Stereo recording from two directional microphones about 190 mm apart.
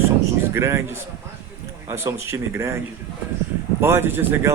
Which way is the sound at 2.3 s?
15° right (ahead or behind).